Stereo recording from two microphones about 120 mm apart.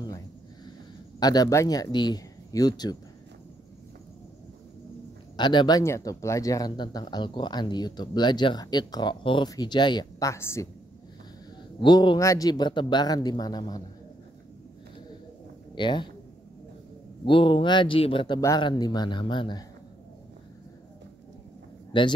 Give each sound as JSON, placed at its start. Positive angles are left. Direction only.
{"t": 1.2, "sound": "speech", "side_deg": 30}
{"t": 5.4, "sound": "a woman's voice", "side_deg": 40}
{"t": 11.8, "sound": "speech", "side_deg": 40}
{"t": 12.2, "sound": "speech", "side_deg": 30}
{"t": 15.7, "sound": "speech", "side_deg": 40}
{"t": 17.2, "sound": "speech", "side_deg": 45}
{"t": 21.9, "sound": "speech", "side_deg": 45}